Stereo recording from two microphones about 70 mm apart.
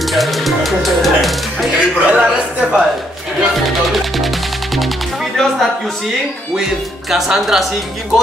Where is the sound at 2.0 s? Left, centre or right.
Centre.